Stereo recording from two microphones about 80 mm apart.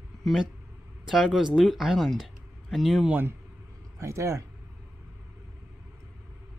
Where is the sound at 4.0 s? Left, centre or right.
Right.